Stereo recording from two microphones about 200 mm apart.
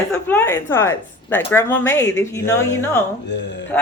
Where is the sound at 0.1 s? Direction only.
10° left (ahead or behind).